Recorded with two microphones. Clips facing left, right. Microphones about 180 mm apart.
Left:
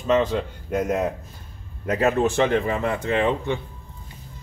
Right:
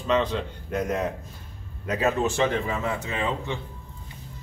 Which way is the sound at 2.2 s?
60° left (ahead or behind).